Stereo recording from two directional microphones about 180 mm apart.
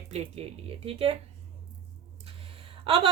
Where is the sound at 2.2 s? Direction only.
30° right (ahead or behind).